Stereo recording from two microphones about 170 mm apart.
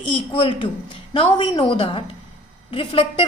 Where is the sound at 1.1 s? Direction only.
30° left (ahead or behind).